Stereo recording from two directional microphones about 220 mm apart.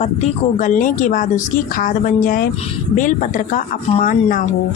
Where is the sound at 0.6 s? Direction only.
35° left (ahead or behind).